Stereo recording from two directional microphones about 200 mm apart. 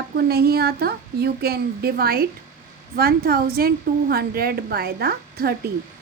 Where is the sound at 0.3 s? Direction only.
50° right (ahead or behind).